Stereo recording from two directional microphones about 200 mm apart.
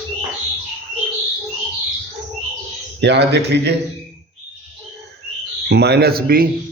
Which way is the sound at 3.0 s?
60° right (ahead or behind).